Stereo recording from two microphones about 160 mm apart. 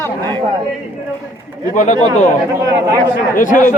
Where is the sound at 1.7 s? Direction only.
55° left (ahead or behind).